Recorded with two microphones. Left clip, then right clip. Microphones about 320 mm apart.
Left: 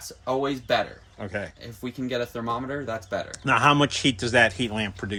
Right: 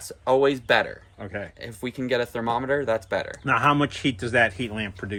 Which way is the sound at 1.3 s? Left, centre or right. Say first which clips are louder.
Left 1 dB; centre.